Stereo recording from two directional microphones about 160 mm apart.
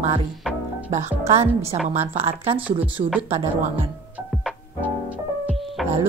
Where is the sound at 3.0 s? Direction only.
10° right (ahead or behind).